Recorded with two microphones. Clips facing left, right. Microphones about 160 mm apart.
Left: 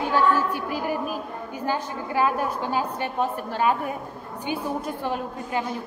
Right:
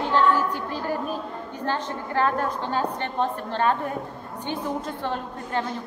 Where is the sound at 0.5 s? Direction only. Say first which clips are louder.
Left 1 dB; 10° left (ahead or behind).